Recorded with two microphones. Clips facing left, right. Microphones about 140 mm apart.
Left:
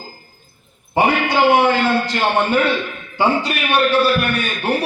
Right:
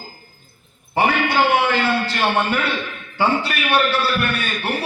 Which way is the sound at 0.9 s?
15° left (ahead or behind).